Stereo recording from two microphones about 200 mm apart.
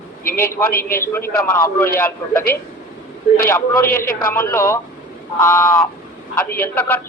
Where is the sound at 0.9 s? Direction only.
10° left (ahead or behind).